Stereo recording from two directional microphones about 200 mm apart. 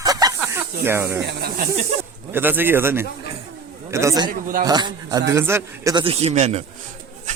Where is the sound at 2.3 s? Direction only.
10° right (ahead or behind).